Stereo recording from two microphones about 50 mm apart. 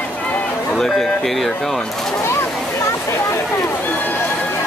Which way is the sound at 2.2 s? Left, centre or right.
Left.